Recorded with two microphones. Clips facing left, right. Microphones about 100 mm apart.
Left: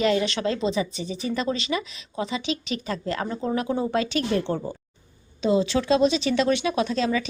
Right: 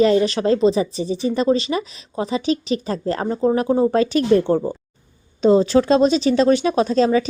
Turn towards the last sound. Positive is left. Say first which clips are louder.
# right 7 dB
turn(degrees=-35)  # may be behind; listen again after turning